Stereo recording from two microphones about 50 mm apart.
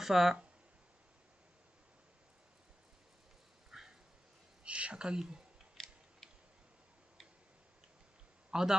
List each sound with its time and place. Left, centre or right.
0.0 s speech: centre
3.7 s dog: centre
4.6 s speech: right
5.7 s scissors: centre
8.4 s a man's voice: centre